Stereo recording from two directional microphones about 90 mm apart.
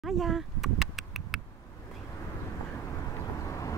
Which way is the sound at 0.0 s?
Centre (ahead or behind).